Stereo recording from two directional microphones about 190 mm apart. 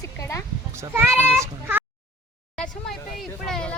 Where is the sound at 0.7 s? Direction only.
15° right (ahead or behind).